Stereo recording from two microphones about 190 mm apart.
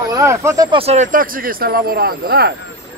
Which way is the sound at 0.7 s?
30° right (ahead or behind).